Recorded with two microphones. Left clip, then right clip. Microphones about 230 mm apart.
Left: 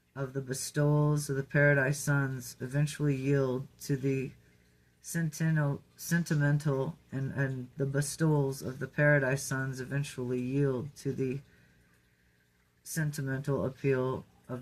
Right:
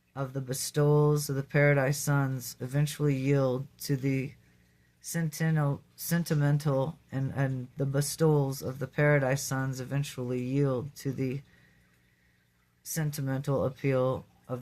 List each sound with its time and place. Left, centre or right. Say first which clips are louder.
0.1 s speech: right 1 dB; right
12.8 s speech: right 1 dB; right